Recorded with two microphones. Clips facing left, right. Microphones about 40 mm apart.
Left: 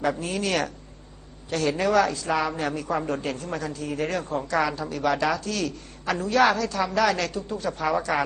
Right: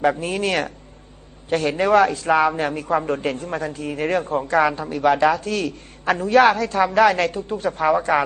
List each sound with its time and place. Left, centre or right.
0.0 s a woman's voice: right